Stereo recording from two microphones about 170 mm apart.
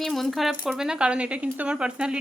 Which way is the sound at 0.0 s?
Centre (ahead or behind).